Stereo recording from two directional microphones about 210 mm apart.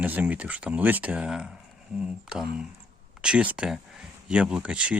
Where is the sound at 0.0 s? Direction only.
5° right (ahead or behind).